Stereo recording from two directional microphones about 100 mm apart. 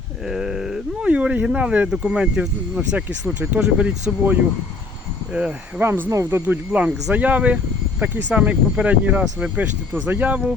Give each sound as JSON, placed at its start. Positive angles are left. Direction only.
{"t": 0.3, "sound": "speech", "side_deg": -5}
{"t": 5.8, "sound": "speech", "side_deg": -25}
{"t": 6.4, "sound": "speech", "side_deg": -15}